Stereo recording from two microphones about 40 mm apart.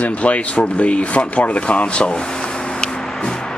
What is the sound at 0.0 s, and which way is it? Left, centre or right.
Speech, left.